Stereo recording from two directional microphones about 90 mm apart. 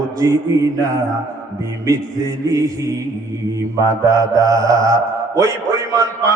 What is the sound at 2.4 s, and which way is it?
A man's voice, 40° right (ahead or behind).